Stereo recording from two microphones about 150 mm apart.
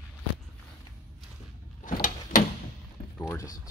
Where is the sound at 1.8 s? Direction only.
65° left (ahead or behind).